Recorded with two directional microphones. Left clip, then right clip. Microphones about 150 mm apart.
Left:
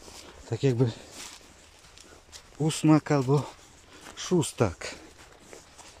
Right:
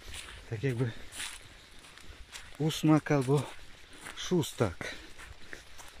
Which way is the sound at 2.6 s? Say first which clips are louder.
Left 4 dB; 5° left (ahead or behind).